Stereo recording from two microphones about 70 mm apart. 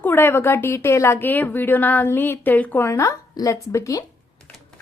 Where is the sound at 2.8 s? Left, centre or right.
Left.